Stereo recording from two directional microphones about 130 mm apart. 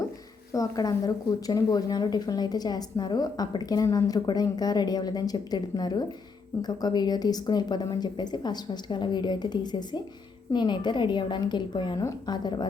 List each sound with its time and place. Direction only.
0.5 s a woman's voice: 25° left (ahead or behind)